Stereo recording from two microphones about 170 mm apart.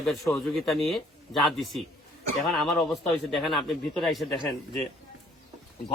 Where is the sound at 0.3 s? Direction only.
15° left (ahead or behind).